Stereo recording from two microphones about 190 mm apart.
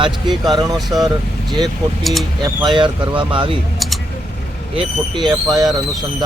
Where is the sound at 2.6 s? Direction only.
25° right (ahead or behind).